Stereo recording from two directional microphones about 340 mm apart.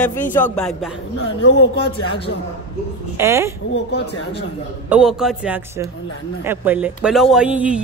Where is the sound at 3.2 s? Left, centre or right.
Centre.